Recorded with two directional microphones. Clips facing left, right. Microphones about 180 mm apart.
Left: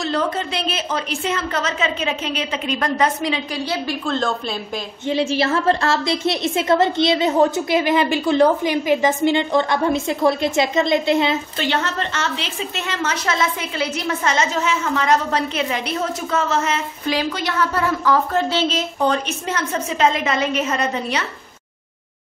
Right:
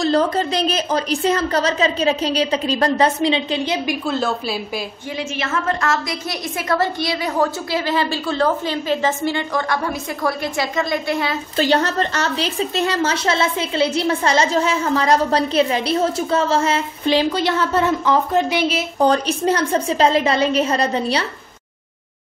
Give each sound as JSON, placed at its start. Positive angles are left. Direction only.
{"t": 0.0, "sound": "a woman's voice", "side_deg": -35}
{"t": 4.0, "sound": "speech", "side_deg": -5}
{"t": 5.1, "sound": "a woman's voice", "side_deg": 30}
{"t": 11.5, "sound": "a woman's voice", "side_deg": -40}
{"t": 19.0, "sound": "a woman's voice", "side_deg": -35}